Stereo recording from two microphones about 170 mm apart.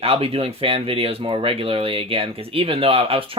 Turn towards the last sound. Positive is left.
turn(degrees=-35)  # may be behind; listen again after turning